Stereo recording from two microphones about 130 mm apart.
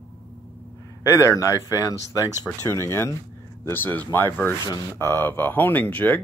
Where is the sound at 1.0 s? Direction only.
25° left (ahead or behind).